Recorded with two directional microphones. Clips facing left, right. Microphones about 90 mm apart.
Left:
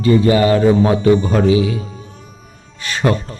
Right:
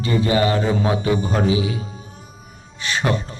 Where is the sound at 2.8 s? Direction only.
40° left (ahead or behind).